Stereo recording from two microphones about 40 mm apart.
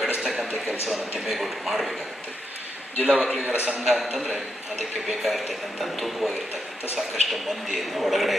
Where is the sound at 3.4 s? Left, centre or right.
Right.